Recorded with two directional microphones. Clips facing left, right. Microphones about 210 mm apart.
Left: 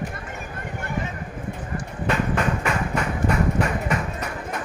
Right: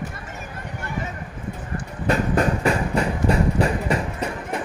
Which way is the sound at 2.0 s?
35° right (ahead or behind).